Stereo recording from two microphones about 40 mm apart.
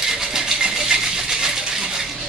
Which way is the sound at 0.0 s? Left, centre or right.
Centre.